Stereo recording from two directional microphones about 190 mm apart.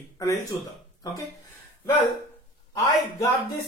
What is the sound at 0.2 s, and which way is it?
Speech, 15° left (ahead or behind).